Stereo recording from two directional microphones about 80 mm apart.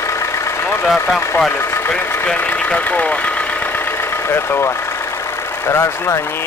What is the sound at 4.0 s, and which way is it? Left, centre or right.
Speech, left.